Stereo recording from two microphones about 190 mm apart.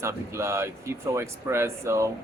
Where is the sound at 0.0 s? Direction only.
15° right (ahead or behind).